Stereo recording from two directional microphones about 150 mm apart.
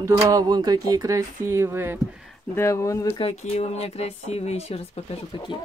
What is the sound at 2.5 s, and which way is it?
Speech, 20° left (ahead or behind).